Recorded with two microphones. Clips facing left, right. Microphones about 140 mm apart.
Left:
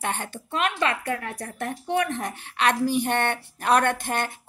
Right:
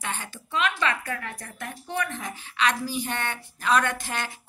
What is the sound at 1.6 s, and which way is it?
A woman's voice, 60° left (ahead or behind).